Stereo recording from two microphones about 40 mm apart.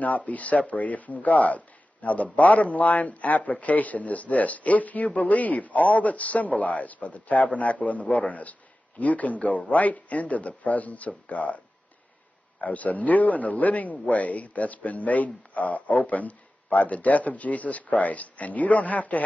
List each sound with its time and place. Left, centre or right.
0.0 s speech: left